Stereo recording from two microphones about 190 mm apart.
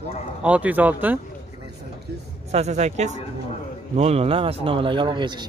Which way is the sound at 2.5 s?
35° right (ahead or behind).